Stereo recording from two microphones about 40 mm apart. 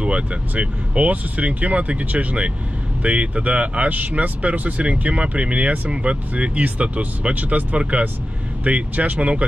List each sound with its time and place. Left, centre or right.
0.0 s speech: right